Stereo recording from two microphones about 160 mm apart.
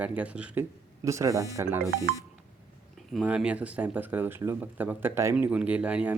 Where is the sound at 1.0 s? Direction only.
20° right (ahead or behind).